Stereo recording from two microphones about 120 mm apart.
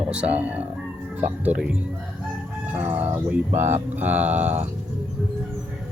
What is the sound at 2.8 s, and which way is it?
Speech, 15° right (ahead or behind).